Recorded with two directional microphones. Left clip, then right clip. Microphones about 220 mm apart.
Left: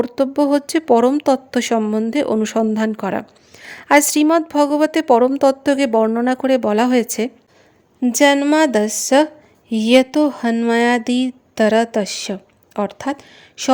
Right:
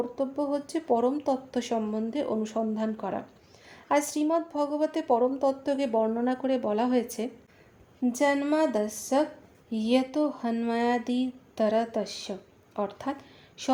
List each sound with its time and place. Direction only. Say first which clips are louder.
0.0 s speech: left 13 dB; 45° left (ahead or behind)